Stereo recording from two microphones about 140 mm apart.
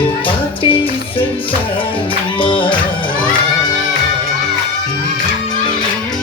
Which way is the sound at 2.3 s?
35° left (ahead or behind).